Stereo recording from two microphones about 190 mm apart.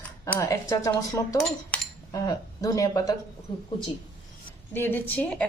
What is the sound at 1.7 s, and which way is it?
Cutlery, 5° left (ahead or behind).